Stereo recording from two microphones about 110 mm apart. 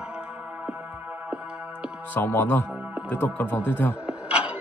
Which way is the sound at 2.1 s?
20° left (ahead or behind).